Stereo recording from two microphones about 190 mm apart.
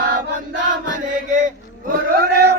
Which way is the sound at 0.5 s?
45° right (ahead or behind).